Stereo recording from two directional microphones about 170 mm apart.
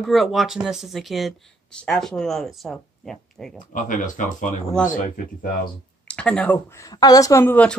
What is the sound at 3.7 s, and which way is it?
Speech, 50° left (ahead or behind).